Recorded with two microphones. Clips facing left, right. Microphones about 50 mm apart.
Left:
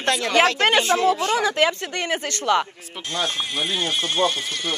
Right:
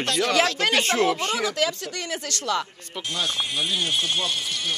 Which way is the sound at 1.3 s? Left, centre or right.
Left.